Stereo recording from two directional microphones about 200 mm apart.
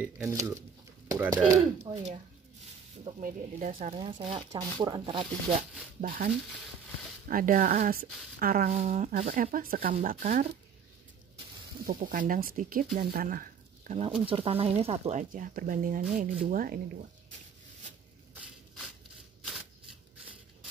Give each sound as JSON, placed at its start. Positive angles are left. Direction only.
{"t": 0.0, "sound": "speech", "side_deg": -15}
{"t": 3.2, "sound": "speech", "side_deg": -40}
{"t": 5.9, "sound": "speech", "side_deg": -45}
{"t": 11.8, "sound": "speech", "side_deg": -40}